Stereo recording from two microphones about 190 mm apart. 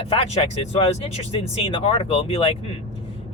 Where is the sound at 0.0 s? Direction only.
30° left (ahead or behind).